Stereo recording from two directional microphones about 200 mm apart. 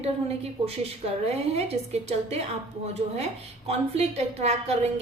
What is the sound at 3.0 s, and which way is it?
A woman's voice, 30° right (ahead or behind).